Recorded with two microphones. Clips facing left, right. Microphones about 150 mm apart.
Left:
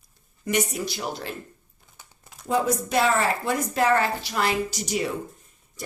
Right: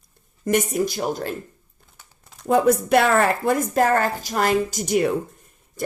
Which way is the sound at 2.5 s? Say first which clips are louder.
Right 7 dB; 60° right (ahead or behind).